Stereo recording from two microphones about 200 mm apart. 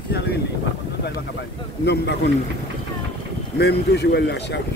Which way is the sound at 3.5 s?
55° left (ahead or behind).